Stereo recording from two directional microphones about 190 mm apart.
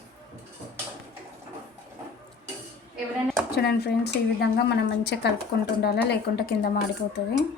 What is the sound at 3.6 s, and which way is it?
Speech, 60° left (ahead or behind).